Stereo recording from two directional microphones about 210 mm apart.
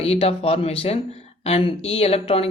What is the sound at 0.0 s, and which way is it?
Speech, 30° left (ahead or behind).